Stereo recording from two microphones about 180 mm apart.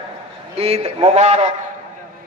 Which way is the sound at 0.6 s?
35° right (ahead or behind).